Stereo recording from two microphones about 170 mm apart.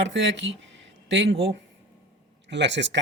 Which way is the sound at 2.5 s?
90° right.